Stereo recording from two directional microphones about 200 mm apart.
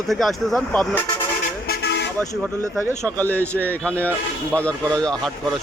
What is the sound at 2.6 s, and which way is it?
Speech, 15° right (ahead or behind).